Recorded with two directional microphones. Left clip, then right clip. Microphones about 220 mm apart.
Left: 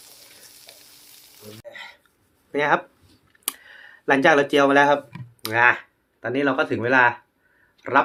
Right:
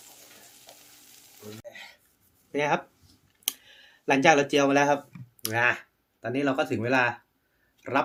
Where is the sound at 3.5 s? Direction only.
10° right (ahead or behind).